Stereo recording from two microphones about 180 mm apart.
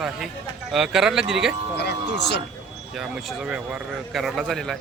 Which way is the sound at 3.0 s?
5° right (ahead or behind).